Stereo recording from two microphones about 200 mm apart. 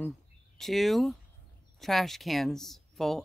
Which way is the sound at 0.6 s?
Centre (ahead or behind).